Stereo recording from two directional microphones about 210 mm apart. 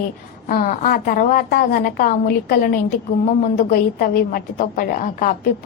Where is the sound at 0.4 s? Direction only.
40° left (ahead or behind).